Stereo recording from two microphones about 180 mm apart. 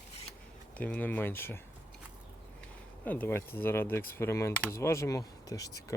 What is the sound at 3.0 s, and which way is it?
Speech, 10° left (ahead or behind).